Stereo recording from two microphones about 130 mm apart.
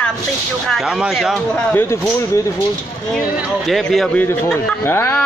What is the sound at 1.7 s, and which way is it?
Speech, 20° left (ahead or behind).